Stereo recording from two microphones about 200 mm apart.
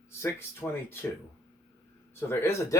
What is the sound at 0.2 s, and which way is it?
Speech, 10° left (ahead or behind).